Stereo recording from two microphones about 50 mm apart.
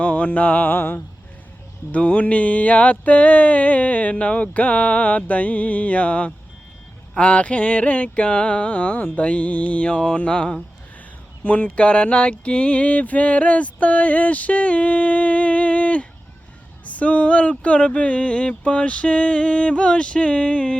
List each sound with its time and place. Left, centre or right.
0.0 s music: left
0.8 s speech: left
1.9 s a sound: left